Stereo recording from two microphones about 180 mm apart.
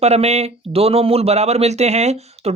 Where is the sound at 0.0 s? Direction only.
35° right (ahead or behind).